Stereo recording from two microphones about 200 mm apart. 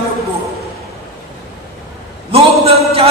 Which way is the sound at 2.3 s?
30° right (ahead or behind).